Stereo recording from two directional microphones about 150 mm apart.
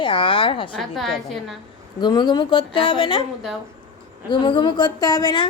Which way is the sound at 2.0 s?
30° left (ahead or behind).